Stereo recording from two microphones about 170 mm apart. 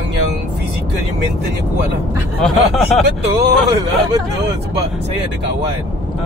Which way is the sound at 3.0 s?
80° right.